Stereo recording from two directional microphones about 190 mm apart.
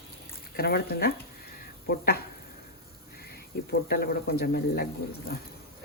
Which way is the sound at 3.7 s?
55° left (ahead or behind).